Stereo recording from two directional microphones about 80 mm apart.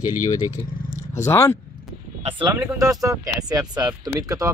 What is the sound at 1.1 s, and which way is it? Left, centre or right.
Speech, left.